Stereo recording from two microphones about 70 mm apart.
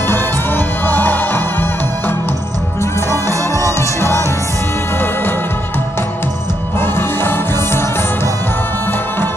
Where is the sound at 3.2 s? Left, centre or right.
Right.